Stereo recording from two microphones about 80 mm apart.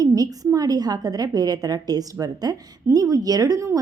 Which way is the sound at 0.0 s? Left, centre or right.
Right.